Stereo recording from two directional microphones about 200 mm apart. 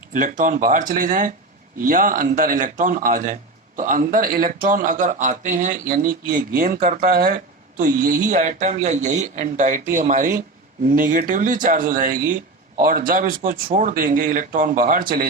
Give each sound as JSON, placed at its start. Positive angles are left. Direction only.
{"t": 0.2, "sound": "a man's voice", "side_deg": -40}